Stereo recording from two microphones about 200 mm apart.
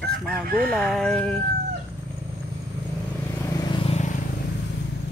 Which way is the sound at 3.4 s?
20° left (ahead or behind).